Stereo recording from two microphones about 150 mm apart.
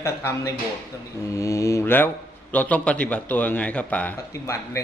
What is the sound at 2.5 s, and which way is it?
A man's voice, 10° left (ahead or behind).